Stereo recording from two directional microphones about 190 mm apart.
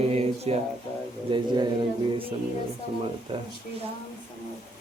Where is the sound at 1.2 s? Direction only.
25° right (ahead or behind).